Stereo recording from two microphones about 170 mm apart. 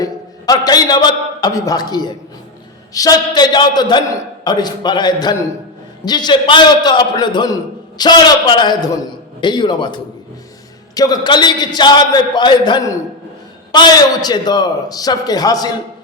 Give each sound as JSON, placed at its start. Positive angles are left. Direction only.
{"t": 0.0, "sound": "a man's voice", "side_deg": 20}